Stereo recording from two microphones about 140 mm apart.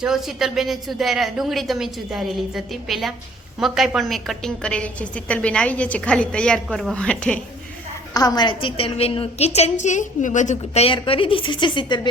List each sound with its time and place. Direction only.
0.0 s a woman's voice: centre (ahead or behind)
8.1 s a woman's voice: 25° left (ahead or behind); by 10.9 s 50° left (ahead or behind)
10.9 s a woman's voice: 40° left (ahead or behind)